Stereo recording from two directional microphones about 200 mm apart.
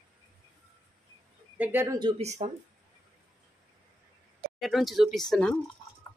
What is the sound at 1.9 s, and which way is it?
Speech, 25° right (ahead or behind).